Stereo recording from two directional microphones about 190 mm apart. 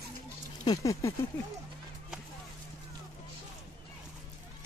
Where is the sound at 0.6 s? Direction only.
15° left (ahead or behind).